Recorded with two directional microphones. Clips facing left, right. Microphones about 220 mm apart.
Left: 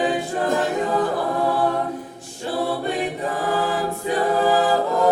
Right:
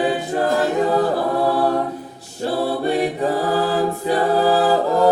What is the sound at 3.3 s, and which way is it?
Choir, 35° right (ahead or behind).